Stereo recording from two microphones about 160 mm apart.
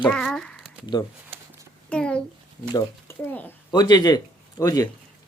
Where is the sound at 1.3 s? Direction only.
35° right (ahead or behind).